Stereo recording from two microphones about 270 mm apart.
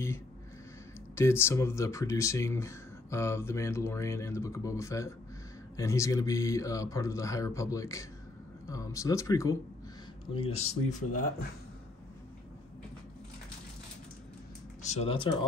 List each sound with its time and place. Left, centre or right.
1.1 s speech: centre
10.6 s speech: left
14.9 s speech: left